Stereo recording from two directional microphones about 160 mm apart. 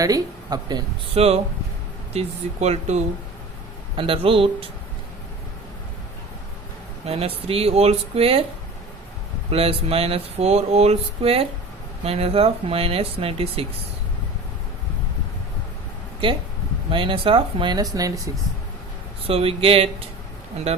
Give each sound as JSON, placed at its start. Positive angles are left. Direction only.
{"t": 0.0, "sound": "speech", "side_deg": -25}
{"t": 1.1, "sound": "speech", "side_deg": -40}
{"t": 3.9, "sound": "speech", "side_deg": -35}
{"t": 7.0, "sound": "speech", "side_deg": -40}
{"t": 9.5, "sound": "speech", "side_deg": -40}
{"t": 16.9, "sound": "speech", "side_deg": -35}
{"t": 19.3, "sound": "speech", "side_deg": -35}